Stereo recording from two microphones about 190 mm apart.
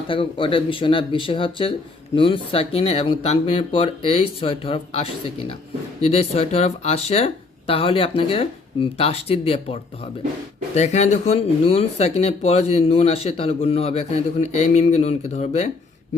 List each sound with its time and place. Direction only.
0.1 s speech: 25° left (ahead or behind)